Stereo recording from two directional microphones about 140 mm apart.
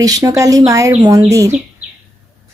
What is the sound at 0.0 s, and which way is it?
Speech, 25° right (ahead or behind).